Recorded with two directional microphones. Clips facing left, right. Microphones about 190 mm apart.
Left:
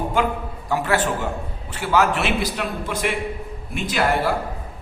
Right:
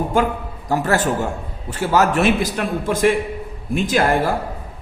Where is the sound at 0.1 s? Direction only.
45° right (ahead or behind).